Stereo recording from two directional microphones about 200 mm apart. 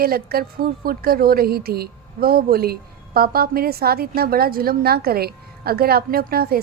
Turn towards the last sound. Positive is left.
turn(degrees=-50)  # may be behind; listen again after turning